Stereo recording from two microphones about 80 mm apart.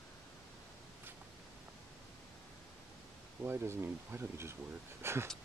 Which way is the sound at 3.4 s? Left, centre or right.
Right.